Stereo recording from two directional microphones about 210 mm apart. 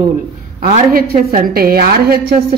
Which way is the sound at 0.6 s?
35° right (ahead or behind).